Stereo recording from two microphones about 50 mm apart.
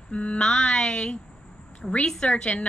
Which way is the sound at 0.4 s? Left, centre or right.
Centre.